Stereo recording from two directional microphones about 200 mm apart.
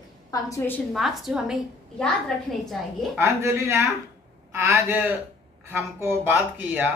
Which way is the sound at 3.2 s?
10° right (ahead or behind).